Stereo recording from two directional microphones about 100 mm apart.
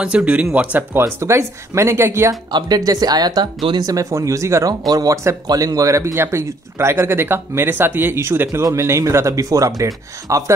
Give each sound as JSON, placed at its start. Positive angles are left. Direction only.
{"t": 0.0, "sound": "speech", "side_deg": -10}
{"t": 0.9, "sound": "speech", "side_deg": -25}
{"t": 2.5, "sound": "speech", "side_deg": -40}